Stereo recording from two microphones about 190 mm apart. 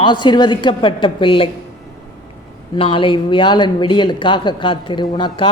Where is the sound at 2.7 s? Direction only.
25° left (ahead or behind).